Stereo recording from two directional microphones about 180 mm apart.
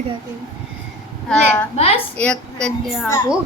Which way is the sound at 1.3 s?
10° left (ahead or behind).